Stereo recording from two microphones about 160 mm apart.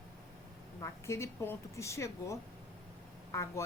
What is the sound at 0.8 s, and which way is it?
A woman's voice, 20° left (ahead or behind).